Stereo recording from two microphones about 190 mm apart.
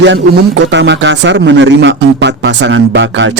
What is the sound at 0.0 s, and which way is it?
A man's voice, 70° right (ahead or behind).